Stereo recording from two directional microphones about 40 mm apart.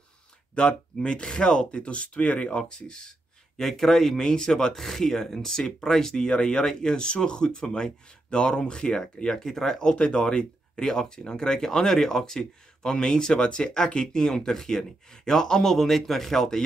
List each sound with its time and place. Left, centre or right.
0.6 s speech: left